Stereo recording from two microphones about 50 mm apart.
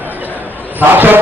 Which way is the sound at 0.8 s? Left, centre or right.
Right.